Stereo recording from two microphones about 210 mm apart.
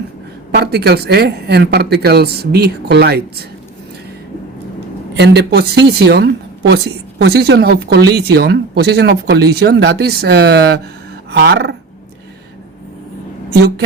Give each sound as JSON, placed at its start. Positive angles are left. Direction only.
{"t": 0.5, "sound": "a woman's voice", "side_deg": -50}
{"t": 5.1, "sound": "a woman's voice", "side_deg": -55}